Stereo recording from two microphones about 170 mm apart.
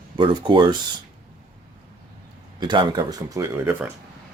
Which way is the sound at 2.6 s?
25° right (ahead or behind).